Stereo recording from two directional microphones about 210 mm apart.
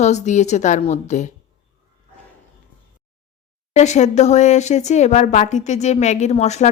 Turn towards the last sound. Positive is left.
turn(degrees=30)  # may be behind; listen again after turning